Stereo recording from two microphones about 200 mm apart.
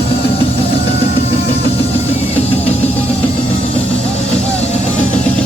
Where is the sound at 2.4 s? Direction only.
30° left (ahead or behind).